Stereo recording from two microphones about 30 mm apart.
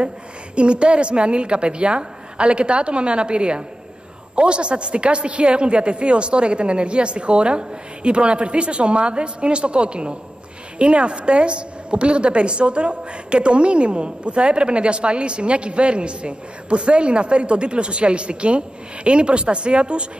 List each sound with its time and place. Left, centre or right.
0.6 s a woman's voice: right